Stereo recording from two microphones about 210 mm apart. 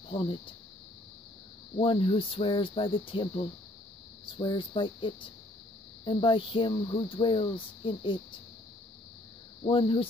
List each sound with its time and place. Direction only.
0.1 s speech: 25° left (ahead or behind)
1.8 s speech: 25° left (ahead or behind)
9.7 s speech: 25° left (ahead or behind)